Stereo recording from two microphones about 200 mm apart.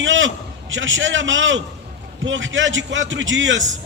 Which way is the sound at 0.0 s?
70° right (ahead or behind).